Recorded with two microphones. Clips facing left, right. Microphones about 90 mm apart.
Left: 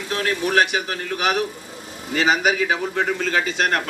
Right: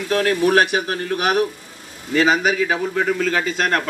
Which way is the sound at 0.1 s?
45° right (ahead or behind).